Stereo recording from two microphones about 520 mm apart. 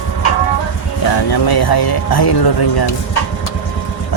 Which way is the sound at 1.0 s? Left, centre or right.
Left.